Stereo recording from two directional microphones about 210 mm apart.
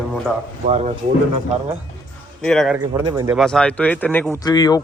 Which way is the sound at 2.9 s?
20° right (ahead or behind).